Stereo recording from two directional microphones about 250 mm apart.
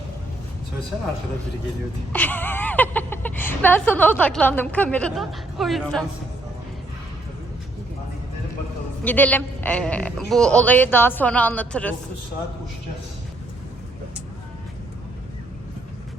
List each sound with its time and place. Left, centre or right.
2.1 s speech: centre
9.0 s a woman's voice: centre